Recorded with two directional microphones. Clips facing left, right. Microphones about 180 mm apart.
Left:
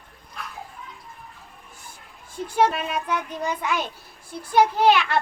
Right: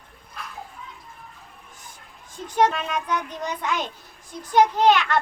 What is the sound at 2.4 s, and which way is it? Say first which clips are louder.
A child's voice: even; 10° left (ahead or behind).